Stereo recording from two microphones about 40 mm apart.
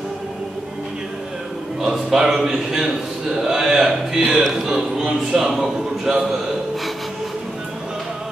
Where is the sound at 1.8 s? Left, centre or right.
Centre.